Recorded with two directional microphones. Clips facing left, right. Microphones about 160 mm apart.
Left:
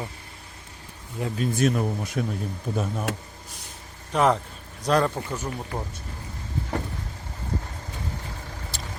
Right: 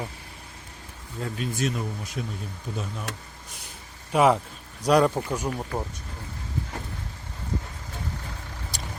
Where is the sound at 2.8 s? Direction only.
50° left (ahead or behind).